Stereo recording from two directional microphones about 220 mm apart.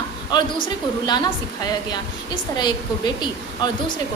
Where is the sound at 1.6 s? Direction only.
20° left (ahead or behind).